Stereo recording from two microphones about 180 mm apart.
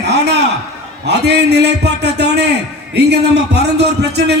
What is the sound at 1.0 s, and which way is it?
A man's voice, 70° right (ahead or behind).